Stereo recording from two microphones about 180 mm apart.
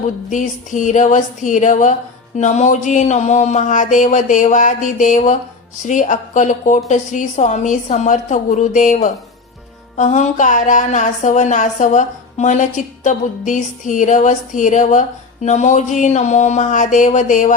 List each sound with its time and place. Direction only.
0.3 s a woman's voice: 45° left (ahead or behind)